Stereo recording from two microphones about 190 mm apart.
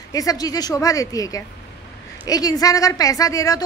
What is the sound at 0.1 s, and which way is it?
A woman's voice, 20° left (ahead or behind).